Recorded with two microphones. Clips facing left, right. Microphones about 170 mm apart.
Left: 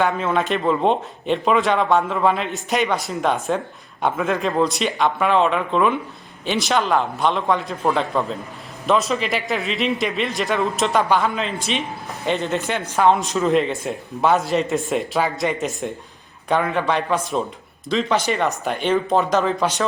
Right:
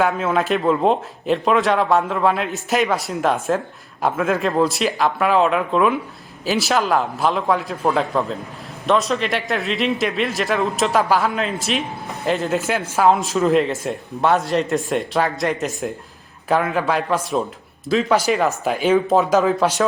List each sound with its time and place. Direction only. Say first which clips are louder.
0.0 s speech: right 1 dB; 5° right (ahead or behind)